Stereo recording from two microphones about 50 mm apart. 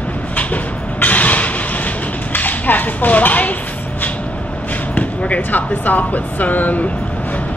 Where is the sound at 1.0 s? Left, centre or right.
Left.